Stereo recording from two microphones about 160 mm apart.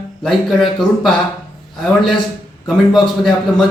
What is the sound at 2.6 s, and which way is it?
Speech, centre (ahead or behind).